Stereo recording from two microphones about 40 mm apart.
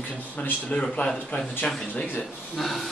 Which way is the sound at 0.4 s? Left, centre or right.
Left.